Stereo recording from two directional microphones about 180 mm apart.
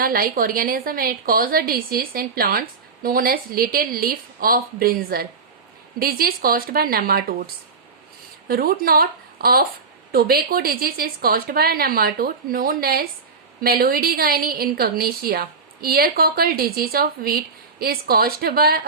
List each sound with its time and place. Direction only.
0.0 s a woman's voice: 55° right (ahead or behind)